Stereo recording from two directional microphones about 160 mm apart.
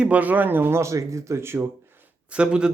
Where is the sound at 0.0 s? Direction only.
10° right (ahead or behind).